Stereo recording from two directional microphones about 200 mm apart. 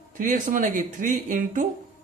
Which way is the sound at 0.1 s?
40° right (ahead or behind).